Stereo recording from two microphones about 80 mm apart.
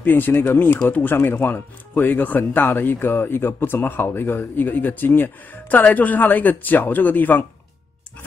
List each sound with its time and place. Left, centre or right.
0.0 s speech: left